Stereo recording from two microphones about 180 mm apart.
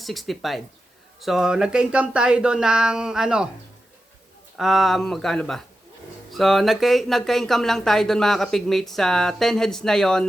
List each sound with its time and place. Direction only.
0.0 s speech: centre (ahead or behind)
4.5 s speech: centre (ahead or behind)